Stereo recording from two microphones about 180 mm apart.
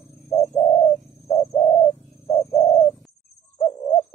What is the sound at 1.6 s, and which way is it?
Bird, 30° left (ahead or behind).